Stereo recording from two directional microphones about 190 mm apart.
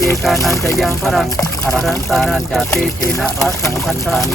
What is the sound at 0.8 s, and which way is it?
Speech, centre (ahead or behind).